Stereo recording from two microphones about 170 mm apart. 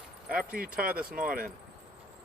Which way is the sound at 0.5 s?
60° right (ahead or behind).